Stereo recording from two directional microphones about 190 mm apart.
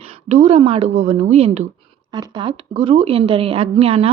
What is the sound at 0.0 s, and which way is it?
Speech, 35° right (ahead or behind).